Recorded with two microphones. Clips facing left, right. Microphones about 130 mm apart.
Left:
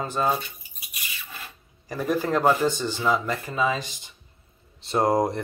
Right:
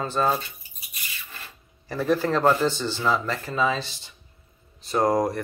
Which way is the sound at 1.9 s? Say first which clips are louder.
Right 1 dB; 15° left (ahead or behind).